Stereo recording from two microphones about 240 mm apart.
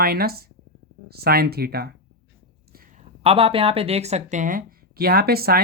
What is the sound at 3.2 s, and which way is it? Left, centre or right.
Speech, right.